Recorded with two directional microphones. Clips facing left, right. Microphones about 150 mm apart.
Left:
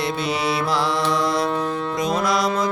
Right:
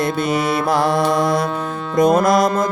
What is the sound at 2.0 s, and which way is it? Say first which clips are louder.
Music: right 10 dB; 50° right (ahead or behind).